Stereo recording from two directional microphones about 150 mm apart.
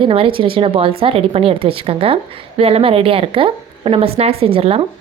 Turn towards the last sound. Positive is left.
turn(degrees=-40)  # may be behind; listen again after turning